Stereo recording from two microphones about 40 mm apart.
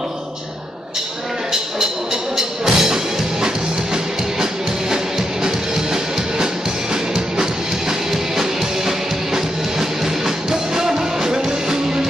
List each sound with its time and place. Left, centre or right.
2.3 s music: centre